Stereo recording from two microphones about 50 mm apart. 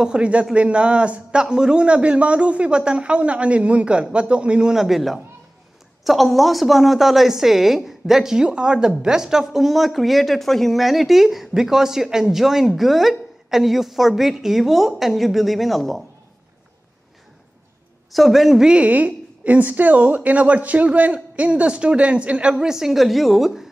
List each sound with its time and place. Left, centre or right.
0.0 s a woman's voice: right
4.7 s speech: centre
18.1 s speech: centre
18.7 s a woman's voice: right; by 23.7 s centre